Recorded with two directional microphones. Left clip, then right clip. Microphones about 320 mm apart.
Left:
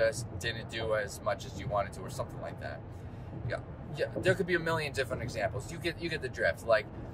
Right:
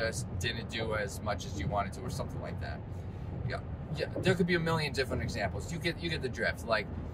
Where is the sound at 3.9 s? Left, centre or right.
Centre.